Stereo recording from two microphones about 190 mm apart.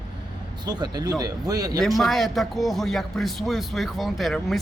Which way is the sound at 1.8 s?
Centre (ahead or behind).